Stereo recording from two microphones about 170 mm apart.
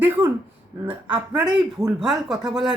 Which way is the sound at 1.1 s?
10° right (ahead or behind).